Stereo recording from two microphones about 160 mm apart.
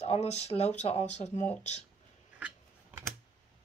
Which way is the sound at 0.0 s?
40° left (ahead or behind).